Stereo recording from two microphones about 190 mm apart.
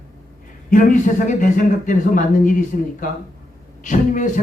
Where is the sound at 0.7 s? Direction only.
45° left (ahead or behind).